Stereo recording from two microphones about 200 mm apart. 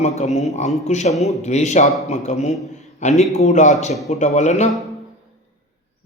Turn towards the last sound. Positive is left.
turn(degrees=35)  # may be behind; listen again after turning